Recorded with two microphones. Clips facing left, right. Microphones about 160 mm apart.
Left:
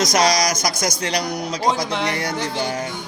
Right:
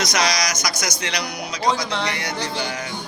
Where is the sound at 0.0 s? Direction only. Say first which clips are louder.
Left 5 dB; 45° left (ahead or behind).